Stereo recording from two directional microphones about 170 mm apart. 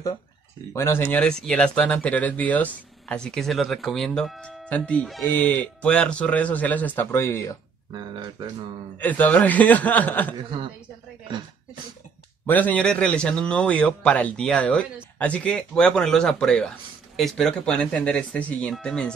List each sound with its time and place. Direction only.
0.7 s speech: 15° left (ahead or behind)
7.9 s speech: 25° right (ahead or behind)
8.9 s speech: 10° left (ahead or behind)
10.3 s a woman's voice: 30° right (ahead or behind)
12.4 s speech: 10° left (ahead or behind)